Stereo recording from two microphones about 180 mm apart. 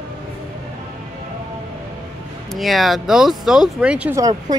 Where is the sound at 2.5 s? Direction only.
Centre (ahead or behind).